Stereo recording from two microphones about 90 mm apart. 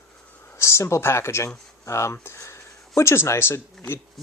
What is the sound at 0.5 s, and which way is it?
Speech, 30° left (ahead or behind).